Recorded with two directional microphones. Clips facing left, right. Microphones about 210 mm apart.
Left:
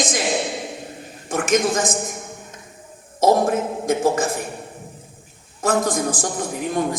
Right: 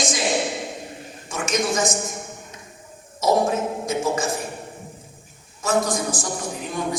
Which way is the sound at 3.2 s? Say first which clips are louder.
Left 3 dB; 55° left (ahead or behind).